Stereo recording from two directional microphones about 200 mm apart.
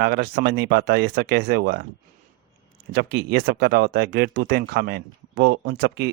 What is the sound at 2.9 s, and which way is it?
Speech, 55° right (ahead or behind).